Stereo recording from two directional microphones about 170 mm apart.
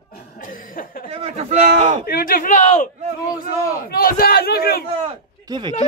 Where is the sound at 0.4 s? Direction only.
55° left (ahead or behind).